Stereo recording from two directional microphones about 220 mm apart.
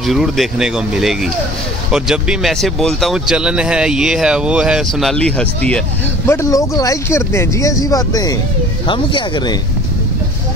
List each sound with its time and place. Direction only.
0.0 s speech: centre (ahead or behind); by 9.6 s 20° left (ahead or behind)